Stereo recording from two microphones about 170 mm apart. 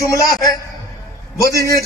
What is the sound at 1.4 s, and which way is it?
Music, 20° left (ahead or behind).